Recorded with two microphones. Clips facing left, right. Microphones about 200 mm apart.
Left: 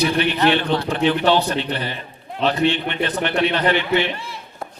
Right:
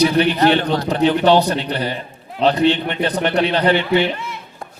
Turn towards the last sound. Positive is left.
turn(degrees=-35)  # may be behind; listen again after turning